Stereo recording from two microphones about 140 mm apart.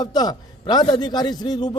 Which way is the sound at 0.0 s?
30° left (ahead or behind).